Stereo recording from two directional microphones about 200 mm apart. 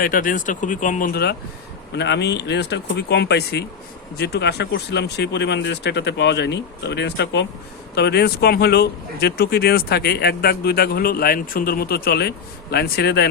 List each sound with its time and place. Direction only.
0.0 s speech: 45° left (ahead or behind)